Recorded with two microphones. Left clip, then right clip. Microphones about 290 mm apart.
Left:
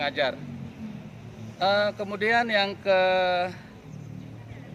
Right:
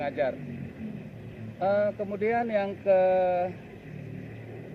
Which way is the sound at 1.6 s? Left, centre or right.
Centre.